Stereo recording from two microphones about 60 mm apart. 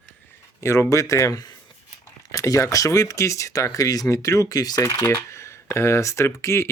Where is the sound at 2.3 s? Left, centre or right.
Left.